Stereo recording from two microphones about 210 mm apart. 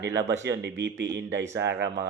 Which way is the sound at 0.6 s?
55° right (ahead or behind).